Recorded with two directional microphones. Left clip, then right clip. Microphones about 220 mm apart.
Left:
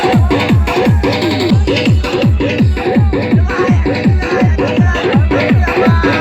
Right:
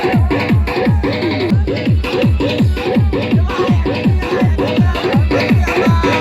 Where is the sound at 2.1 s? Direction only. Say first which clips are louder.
Right 1 dB; 50° right (ahead or behind).